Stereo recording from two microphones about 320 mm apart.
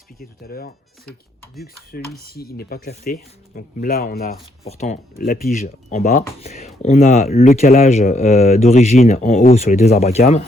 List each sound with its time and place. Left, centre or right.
0.2 s speech: left
2.1 s speech: left